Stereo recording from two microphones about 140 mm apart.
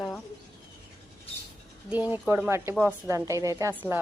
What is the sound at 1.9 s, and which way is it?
A woman's voice, 10° right (ahead or behind).